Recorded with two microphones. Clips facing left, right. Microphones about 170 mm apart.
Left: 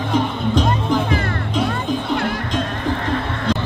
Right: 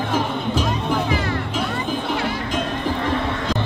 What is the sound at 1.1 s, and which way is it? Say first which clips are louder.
Music: left 1 dB; 55° left (ahead or behind).